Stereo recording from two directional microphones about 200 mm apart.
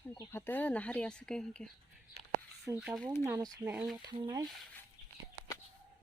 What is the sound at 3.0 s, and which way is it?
Speech, 10° left (ahead or behind).